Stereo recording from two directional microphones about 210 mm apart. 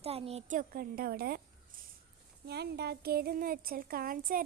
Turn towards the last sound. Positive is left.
turn(degrees=-40)  # may be behind; listen again after turning